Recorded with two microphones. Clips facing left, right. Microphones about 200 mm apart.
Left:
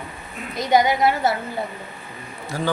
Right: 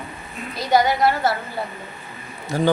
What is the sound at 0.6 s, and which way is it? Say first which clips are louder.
Speech: even; 20° left (ahead or behind).